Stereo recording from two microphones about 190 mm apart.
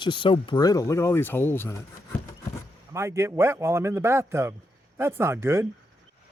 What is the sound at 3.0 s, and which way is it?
Speech, 15° right (ahead or behind).